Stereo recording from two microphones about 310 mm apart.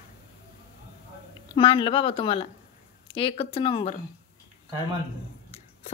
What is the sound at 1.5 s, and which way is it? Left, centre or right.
A woman's voice, centre.